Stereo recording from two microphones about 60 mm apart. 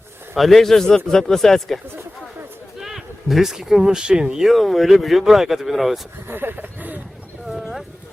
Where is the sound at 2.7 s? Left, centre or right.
Centre.